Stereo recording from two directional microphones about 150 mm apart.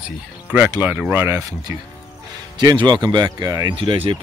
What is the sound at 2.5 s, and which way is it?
Speech, 30° right (ahead or behind).